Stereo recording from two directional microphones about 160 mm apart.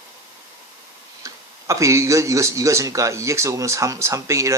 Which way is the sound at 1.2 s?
20° right (ahead or behind).